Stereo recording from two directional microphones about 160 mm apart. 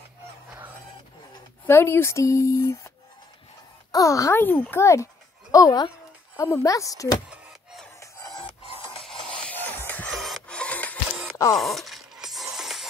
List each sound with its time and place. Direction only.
1.7 s speech: 15° left (ahead or behind)
3.9 s a child's voice: 20° left (ahead or behind)
7.2 s a sound: centre (ahead or behind)
8.0 s filing: 25° left (ahead or behind)
9.0 s filing: 5° left (ahead or behind)
11.5 s a sound: centre (ahead or behind)
12.5 s music: centre (ahead or behind)